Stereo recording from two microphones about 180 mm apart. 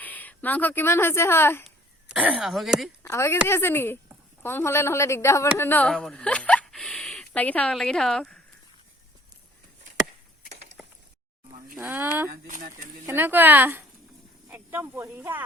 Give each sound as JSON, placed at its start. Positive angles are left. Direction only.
{"t": 0.0, "sound": "speech", "side_deg": 10}
{"t": 1.6, "sound": "speech", "side_deg": -5}
{"t": 3.0, "sound": "a man's voice", "side_deg": 15}
{"t": 10.8, "sound": "a sound", "side_deg": 0}
{"t": 11.9, "sound": "a woman's voice", "side_deg": -10}
{"t": 12.5, "sound": "speech", "side_deg": -45}
{"t": 13.1, "sound": "a woman's voice", "side_deg": -10}